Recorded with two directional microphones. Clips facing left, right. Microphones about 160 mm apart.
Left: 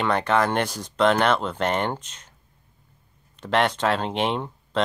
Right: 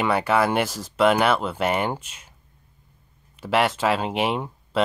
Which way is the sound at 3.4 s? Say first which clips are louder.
Right 1 dB; 5° right (ahead or behind).